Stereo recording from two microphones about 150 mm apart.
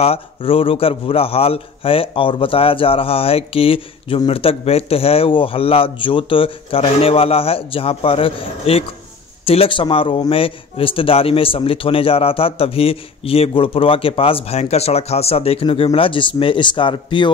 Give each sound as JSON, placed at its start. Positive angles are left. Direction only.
{"t": 0.0, "sound": "a man's voice", "side_deg": 40}